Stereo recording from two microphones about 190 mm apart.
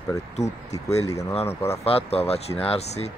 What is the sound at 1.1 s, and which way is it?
Speech, 15° left (ahead or behind).